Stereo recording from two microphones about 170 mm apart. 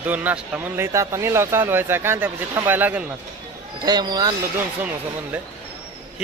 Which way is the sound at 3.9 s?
25° right (ahead or behind).